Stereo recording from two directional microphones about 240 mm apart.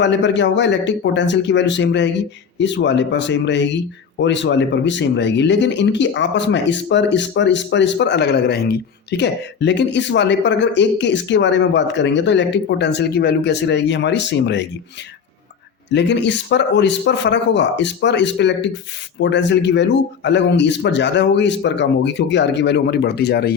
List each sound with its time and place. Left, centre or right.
0.0 s speech: left
15.9 s speech: left